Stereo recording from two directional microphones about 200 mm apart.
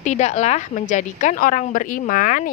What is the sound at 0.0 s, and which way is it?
A woman's voice, 35° left (ahead or behind).